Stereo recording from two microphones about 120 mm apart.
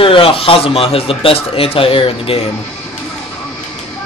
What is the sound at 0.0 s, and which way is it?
Speech, 50° left (ahead or behind).